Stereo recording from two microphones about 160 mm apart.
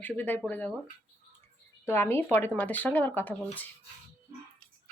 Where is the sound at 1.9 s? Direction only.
15° left (ahead or behind).